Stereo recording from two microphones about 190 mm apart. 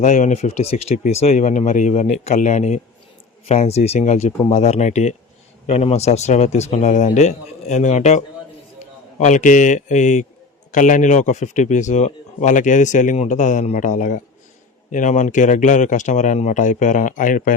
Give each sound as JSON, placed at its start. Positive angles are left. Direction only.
{"t": 0.0, "sound": "a man's voice", "side_deg": 40}